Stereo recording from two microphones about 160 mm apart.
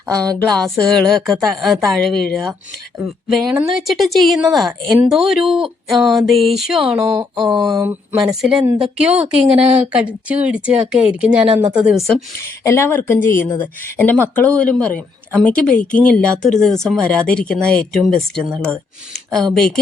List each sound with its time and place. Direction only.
0.3 s speech: 5° left (ahead or behind)
7.5 s a sound: 25° right (ahead or behind)
8.2 s speech: 5° right (ahead or behind)
12.4 s speech: 15° left (ahead or behind)